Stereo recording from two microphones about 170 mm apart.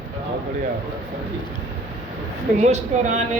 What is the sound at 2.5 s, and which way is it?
Speech, 40° right (ahead or behind).